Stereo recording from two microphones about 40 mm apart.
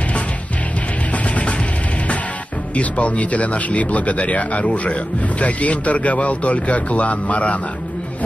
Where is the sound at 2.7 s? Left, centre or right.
Left.